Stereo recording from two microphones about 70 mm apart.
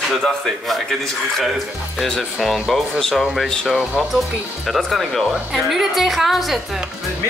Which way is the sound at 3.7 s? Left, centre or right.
Centre.